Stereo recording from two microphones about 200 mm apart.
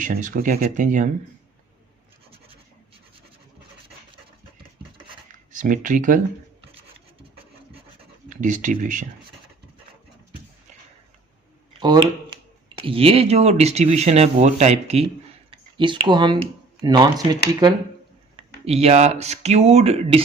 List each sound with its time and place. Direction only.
0.0 s speech: 40° right (ahead or behind)
5.5 s speech: 40° right (ahead or behind)
8.3 s speech: 40° right (ahead or behind)
11.8 s speech: 20° right (ahead or behind)
18.3 s speech: 30° right (ahead or behind)